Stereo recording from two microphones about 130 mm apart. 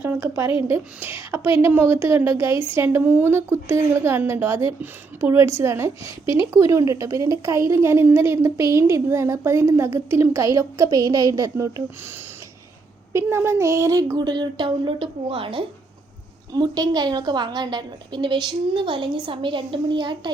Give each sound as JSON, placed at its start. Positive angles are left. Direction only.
{"t": 0.0, "sound": "a woman's voice", "side_deg": -15}
{"t": 13.1, "sound": "a woman's voice", "side_deg": -20}
{"t": 16.5, "sound": "a woman's voice", "side_deg": -30}